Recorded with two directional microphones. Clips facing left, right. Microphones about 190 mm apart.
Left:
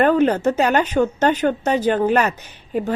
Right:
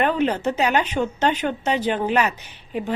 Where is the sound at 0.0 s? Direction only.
45° left (ahead or behind).